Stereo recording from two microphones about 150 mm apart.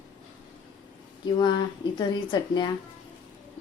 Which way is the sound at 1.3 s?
30° left (ahead or behind).